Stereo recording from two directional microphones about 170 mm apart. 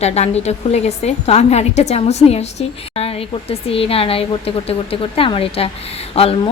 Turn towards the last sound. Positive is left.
turn(degrees=35)  # may be behind; listen again after turning